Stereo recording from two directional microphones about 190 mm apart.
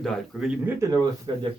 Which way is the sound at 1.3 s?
25° right (ahead or behind).